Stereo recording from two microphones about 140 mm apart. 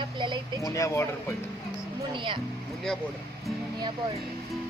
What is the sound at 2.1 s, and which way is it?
Speech, 35° right (ahead or behind).